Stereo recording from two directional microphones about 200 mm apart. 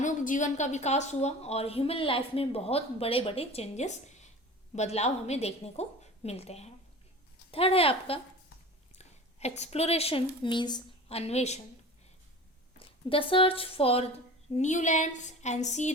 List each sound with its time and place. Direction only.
0.0 s a woman's voice: 40° left (ahead or behind)
13.1 s a woman's voice: 25° left (ahead or behind)